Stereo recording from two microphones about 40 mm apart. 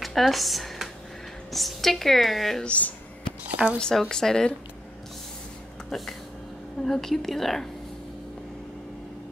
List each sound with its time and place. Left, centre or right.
0.0 s a woman's voice: centre
2.6 s a sound: left
3.8 s a woman's voice: centre
5.9 s a woman's voice: centre